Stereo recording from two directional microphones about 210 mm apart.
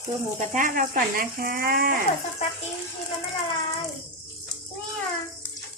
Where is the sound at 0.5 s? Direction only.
40° right (ahead or behind).